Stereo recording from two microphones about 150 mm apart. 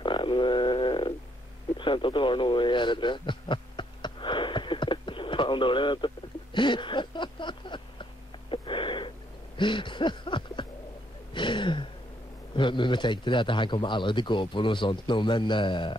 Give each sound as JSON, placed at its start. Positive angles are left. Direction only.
{"t": 0.0, "sound": "frog", "side_deg": 35}
{"t": 1.8, "sound": "radio", "side_deg": 35}
{"t": 9.6, "sound": "a sound", "side_deg": 30}
{"t": 12.5, "sound": "a man's voice", "side_deg": 30}